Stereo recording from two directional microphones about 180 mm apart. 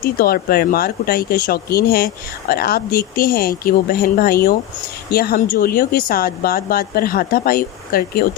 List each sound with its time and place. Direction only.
0.0 s speech: 55° left (ahead or behind)